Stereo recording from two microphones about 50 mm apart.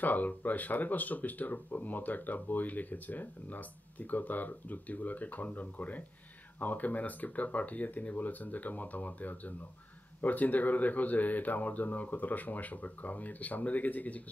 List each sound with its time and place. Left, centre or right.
0.0 s speech: left